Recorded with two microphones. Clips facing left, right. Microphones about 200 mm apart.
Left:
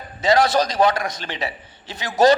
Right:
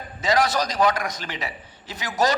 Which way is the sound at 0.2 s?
30° left (ahead or behind).